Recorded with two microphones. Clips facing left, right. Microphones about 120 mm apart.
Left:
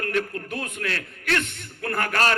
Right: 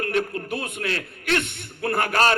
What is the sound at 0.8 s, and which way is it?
A man's voice, 25° right (ahead or behind).